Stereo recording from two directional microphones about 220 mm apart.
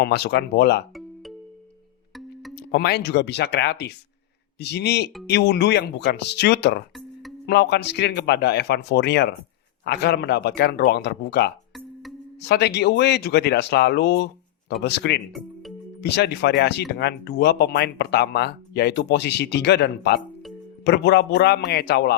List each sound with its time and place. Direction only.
0.0 s speech: 50° left (ahead or behind)
2.6 s speech: 50° left (ahead or behind)
15.3 s music: centre (ahead or behind)
16.0 s speech: 50° left (ahead or behind)